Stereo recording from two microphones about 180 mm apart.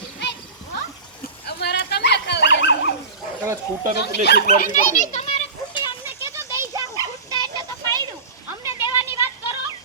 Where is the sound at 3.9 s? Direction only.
65° left (ahead or behind).